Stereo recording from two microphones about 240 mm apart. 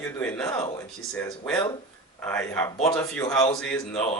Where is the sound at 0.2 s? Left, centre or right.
Centre.